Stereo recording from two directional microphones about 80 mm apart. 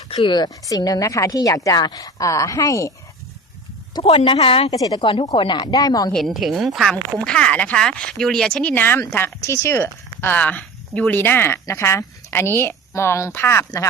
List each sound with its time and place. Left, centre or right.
0.2 s speech: left
0.8 s a woman's voice: left
3.9 s speech: left
6.1 s speech: centre
7.2 s speech: centre
8.7 s a woman's voice: left